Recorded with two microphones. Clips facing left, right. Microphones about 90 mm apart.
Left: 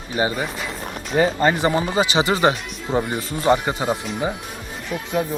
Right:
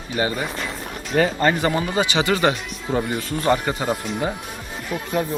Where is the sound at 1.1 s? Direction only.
15° left (ahead or behind).